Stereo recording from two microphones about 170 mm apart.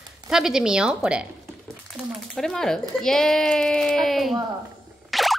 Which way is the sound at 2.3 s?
Centre (ahead or behind).